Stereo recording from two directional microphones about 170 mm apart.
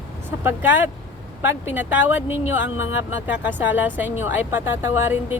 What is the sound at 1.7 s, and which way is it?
Speech, 10° right (ahead or behind).